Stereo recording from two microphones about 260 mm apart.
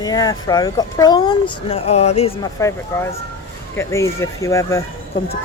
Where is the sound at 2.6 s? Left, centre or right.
Centre.